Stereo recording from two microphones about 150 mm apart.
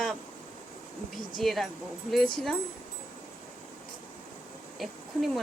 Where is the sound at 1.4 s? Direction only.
Centre (ahead or behind).